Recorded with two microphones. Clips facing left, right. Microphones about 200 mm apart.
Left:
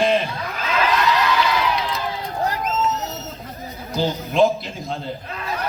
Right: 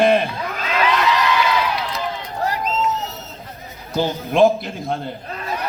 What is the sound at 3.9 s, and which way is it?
Music, 50° right (ahead or behind).